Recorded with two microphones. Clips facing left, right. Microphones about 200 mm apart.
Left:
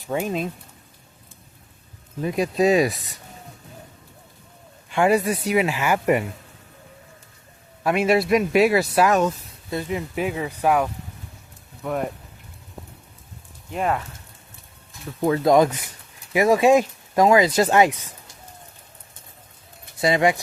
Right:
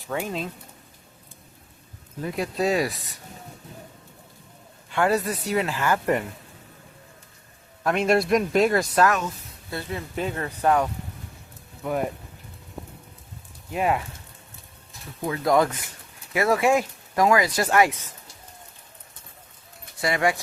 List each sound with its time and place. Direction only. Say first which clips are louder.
0.1 s speech: left 4 dB; 20° left (ahead or behind)
2.2 s speech: left 5 dB; 15° left (ahead or behind)
4.9 s speech: left 4 dB; 15° left (ahead or behind)
7.9 s speech: left 2 dB; 5° left (ahead or behind)
11.8 s speech: even; centre (ahead or behind)
13.7 s speech: even; 5° right (ahead or behind)
15.4 s speech: left 3 dB; 20° left (ahead or behind)
20.0 s speech: left 4 dB; 20° left (ahead or behind)